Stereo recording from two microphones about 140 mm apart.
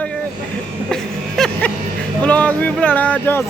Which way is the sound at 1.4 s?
5° left (ahead or behind).